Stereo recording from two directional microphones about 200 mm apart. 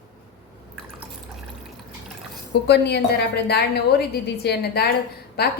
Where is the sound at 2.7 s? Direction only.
55° left (ahead or behind).